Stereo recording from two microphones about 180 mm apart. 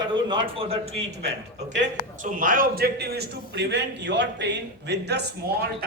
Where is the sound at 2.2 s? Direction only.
50° right (ahead or behind).